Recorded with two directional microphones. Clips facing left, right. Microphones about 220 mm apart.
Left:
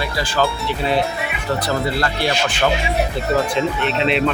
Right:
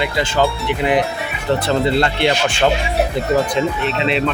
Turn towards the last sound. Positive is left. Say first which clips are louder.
# even
turn(degrees=0)  # may be behind; listen again after turning